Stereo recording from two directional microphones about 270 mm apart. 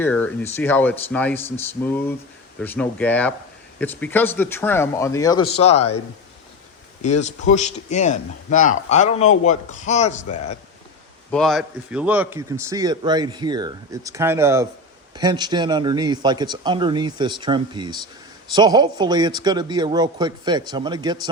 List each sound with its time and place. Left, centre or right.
0.0 s speech: centre; by 5.8 s left
7.0 s a man's voice: left
11.3 s a man's voice: centre